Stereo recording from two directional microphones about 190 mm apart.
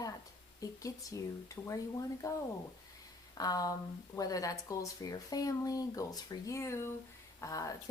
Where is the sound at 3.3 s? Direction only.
20° left (ahead or behind).